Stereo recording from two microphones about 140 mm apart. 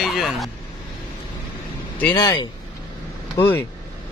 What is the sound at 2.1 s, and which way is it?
Speech, 30° left (ahead or behind).